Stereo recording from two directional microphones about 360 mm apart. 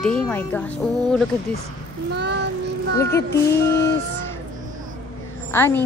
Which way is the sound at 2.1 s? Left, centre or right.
Right.